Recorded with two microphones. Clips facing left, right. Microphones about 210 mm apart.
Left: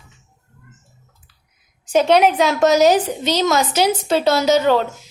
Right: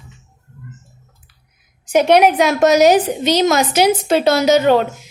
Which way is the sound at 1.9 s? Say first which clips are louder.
Right 2 dB; 15° right (ahead or behind).